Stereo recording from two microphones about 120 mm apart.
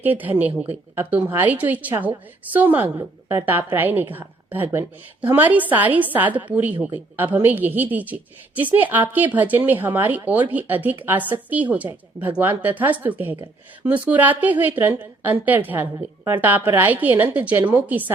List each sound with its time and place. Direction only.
0.0 s a woman's voice: 15° right (ahead or behind)